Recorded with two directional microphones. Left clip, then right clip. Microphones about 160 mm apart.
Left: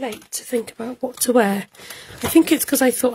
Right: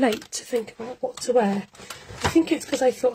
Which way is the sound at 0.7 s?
65° left (ahead or behind).